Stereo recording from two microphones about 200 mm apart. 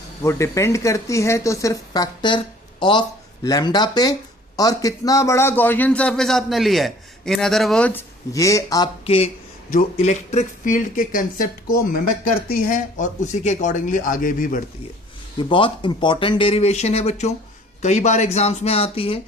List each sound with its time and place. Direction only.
0.2 s a man's voice: 15° left (ahead or behind)
9.0 s speech: 30° left (ahead or behind)
15.4 s speech: 25° left (ahead or behind)